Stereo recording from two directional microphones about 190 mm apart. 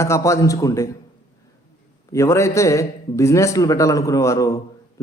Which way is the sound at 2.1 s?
15° left (ahead or behind).